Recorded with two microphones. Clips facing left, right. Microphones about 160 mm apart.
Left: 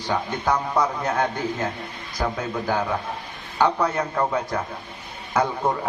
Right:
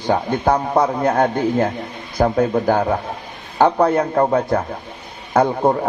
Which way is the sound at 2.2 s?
40° right (ahead or behind).